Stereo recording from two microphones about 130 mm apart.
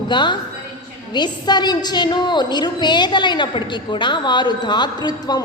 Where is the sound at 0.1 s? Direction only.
35° left (ahead or behind).